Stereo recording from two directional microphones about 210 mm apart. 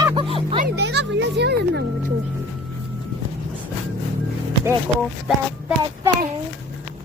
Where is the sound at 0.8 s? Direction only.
55° right (ahead or behind).